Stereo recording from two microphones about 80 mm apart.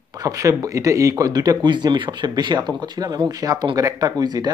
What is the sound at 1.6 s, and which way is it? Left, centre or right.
Speech, right.